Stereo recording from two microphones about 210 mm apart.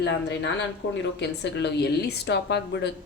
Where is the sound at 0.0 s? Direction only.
55° left (ahead or behind).